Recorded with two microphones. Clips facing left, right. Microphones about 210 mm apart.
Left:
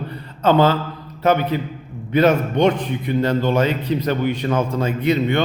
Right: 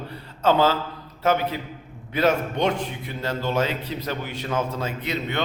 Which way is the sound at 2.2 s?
5° right (ahead or behind).